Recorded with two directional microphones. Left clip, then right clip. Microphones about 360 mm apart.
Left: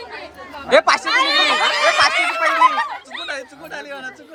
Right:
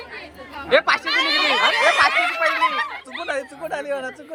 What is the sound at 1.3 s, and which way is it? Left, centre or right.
Speech, left.